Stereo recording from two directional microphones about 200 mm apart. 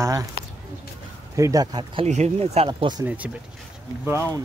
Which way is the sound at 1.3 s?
15° right (ahead or behind).